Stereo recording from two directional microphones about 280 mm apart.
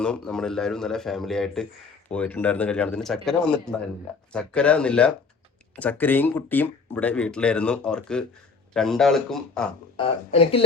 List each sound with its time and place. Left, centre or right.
0.0 s speech: centre
10.0 s speech: centre